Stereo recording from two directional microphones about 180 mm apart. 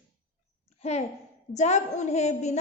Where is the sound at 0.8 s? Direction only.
40° left (ahead or behind).